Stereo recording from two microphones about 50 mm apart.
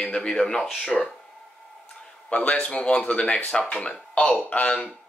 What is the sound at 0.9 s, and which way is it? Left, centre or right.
Speech, centre.